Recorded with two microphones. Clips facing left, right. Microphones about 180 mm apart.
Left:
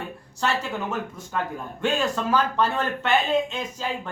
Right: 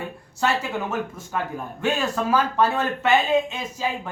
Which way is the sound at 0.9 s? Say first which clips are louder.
Right 2 dB; 5° right (ahead or behind).